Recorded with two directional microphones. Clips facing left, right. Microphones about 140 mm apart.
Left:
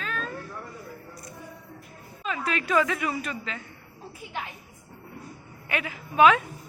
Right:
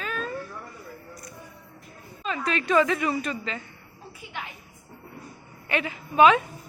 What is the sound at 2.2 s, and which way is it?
A woman's voice, 5° left (ahead or behind).